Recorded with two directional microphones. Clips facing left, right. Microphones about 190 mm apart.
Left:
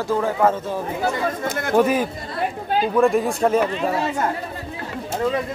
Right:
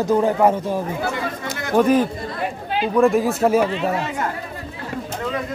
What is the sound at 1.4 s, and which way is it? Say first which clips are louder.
Chatter: left 4 dB; 55° left (ahead or behind).